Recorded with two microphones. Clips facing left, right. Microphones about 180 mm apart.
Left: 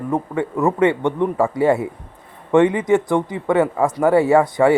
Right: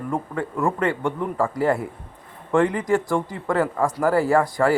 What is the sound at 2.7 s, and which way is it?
Speech, 20° left (ahead or behind).